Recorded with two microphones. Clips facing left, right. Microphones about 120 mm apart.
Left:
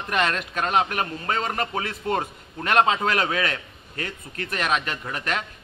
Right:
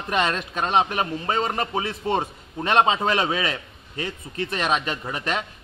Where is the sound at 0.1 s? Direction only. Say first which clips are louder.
Right 1 dB; 25° right (ahead or behind).